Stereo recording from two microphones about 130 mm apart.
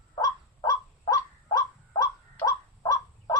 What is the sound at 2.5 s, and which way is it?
Bird, 30° left (ahead or behind).